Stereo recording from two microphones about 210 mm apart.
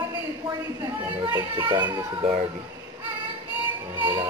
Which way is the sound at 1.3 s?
10° right (ahead or behind).